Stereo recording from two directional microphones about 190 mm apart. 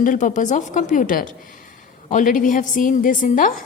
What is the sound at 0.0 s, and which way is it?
A woman's voice, 40° left (ahead or behind).